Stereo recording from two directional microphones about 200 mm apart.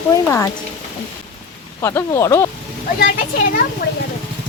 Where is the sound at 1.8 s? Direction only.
15° left (ahead or behind).